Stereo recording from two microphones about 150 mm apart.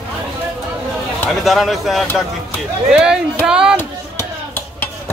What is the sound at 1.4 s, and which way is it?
Speech, centre (ahead or behind).